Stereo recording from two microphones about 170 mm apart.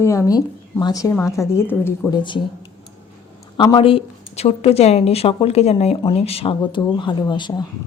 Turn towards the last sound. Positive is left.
turn(degrees=25)  # may be behind; listen again after turning